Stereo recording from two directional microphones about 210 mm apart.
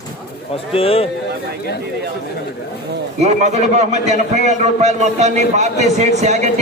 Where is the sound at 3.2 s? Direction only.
35° right (ahead or behind).